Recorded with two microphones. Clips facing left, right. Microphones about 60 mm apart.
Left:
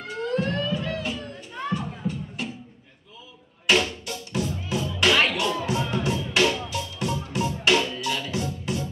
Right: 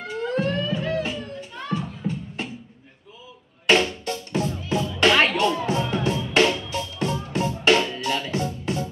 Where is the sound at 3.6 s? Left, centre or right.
Right.